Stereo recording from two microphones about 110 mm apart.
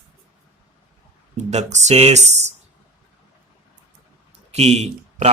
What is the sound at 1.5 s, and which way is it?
Speech, 90° right.